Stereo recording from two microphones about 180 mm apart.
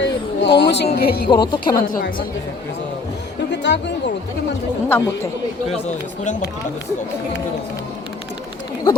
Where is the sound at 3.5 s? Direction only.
75° left (ahead or behind).